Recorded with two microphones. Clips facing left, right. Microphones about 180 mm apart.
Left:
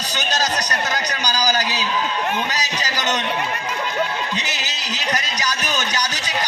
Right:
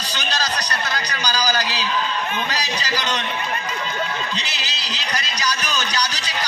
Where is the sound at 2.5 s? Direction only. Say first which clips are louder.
Even; 45° left (ahead or behind).